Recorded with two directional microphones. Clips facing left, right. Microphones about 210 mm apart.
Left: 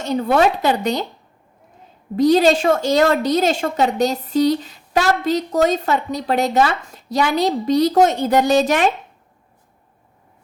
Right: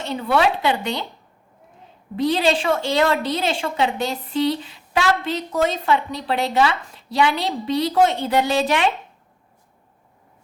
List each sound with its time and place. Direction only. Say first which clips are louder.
0.0 s a woman's voice: left 4 dB; 45° left (ahead or behind)
2.1 s a woman's voice: left 6 dB; 40° left (ahead or behind)